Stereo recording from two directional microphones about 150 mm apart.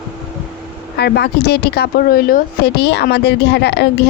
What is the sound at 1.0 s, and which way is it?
Speech, 90° left.